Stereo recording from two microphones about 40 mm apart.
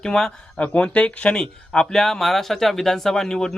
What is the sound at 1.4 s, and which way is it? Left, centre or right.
Speech, centre.